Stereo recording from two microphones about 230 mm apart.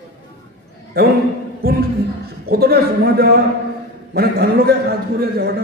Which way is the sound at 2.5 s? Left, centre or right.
Right.